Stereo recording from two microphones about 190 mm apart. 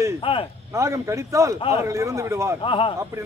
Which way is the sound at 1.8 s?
15° right (ahead or behind).